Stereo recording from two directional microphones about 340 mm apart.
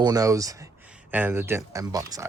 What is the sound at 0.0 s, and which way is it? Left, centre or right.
Speech, centre.